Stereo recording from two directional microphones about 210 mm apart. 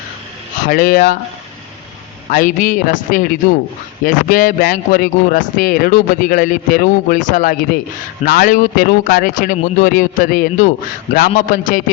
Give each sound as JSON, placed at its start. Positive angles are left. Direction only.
{"t": 0.6, "sound": "speech", "side_deg": 40}
{"t": 2.3, "sound": "speech", "side_deg": 40}